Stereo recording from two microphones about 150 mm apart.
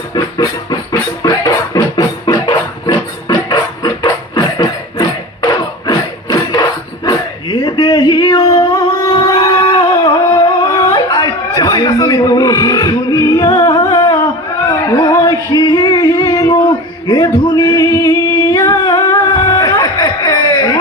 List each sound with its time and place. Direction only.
0.1 s music: 25° left (ahead or behind)
9.3 s a sound: 30° left (ahead or behind)
14.7 s music: 25° left (ahead or behind)